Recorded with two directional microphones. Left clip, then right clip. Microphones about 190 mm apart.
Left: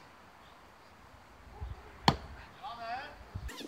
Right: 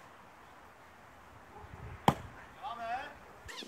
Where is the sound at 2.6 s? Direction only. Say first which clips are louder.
Right 2 dB; 60° right (ahead or behind).